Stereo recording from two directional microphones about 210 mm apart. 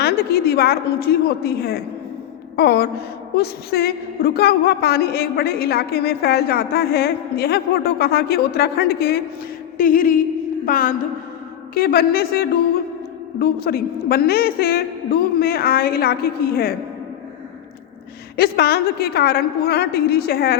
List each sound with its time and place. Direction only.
0.0 s a woman's voice: 50° left (ahead or behind)
9.7 s a sound: 40° left (ahead or behind)
11.7 s a woman's voice: 45° left (ahead or behind)
18.3 s a woman's voice: 50° left (ahead or behind)